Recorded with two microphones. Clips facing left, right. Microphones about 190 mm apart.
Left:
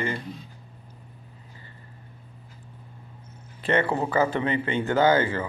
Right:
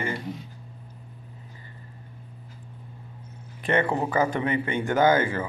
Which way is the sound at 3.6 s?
15° right (ahead or behind).